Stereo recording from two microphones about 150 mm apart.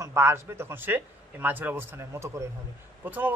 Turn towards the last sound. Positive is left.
turn(degrees=-10)  # may be behind; listen again after turning